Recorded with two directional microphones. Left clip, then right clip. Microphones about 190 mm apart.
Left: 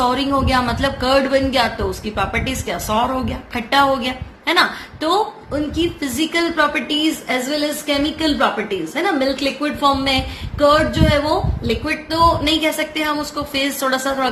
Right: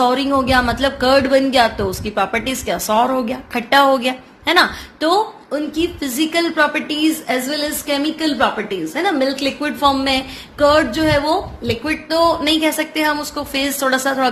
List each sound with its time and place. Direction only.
0.0 s speech: 50° right (ahead or behind)